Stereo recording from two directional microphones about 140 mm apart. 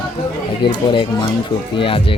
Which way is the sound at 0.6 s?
35° left (ahead or behind).